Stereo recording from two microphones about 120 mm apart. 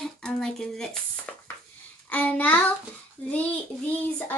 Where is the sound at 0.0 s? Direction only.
5° left (ahead or behind).